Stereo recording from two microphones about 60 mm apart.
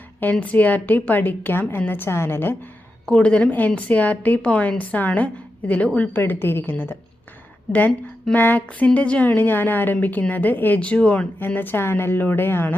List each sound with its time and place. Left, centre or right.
0.2 s a woman's voice: left
3.2 s a woman's voice: left
9.3 s a woman's voice: left
10.8 s a woman's voice: centre
11.3 s a woman's voice: left